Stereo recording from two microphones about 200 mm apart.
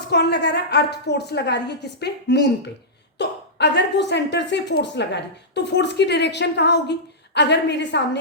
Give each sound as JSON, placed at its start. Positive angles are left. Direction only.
{"t": 0.1, "sound": "a woman's voice", "side_deg": 55}